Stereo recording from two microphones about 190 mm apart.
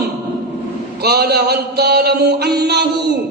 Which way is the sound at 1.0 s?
55° right (ahead or behind).